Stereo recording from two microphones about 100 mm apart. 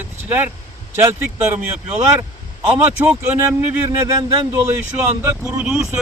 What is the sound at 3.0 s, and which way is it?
Speech, 15° right (ahead or behind).